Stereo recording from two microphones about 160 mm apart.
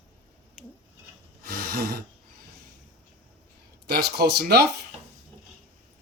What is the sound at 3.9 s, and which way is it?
Speech, 85° right.